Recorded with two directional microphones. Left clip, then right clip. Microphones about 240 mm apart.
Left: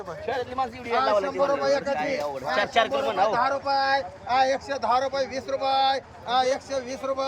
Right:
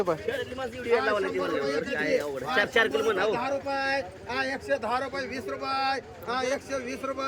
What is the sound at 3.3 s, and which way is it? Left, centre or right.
Speech, centre.